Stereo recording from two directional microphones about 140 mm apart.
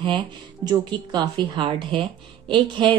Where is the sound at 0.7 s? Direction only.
30° right (ahead or behind).